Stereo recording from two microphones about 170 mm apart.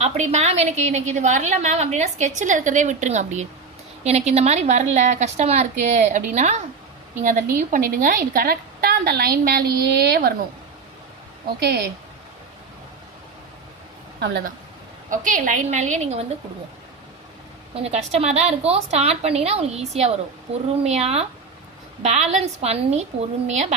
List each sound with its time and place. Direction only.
0.0 s a woman's voice: 40° right (ahead or behind); by 10.3 s 70° right (ahead or behind)
11.4 s a woman's voice: 70° right (ahead or behind)
15.1 s a woman's voice: 50° right (ahead or behind)
17.7 s a woman's voice: 40° right (ahead or behind)